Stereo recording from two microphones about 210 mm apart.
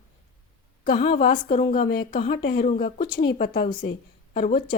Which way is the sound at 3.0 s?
20° left (ahead or behind).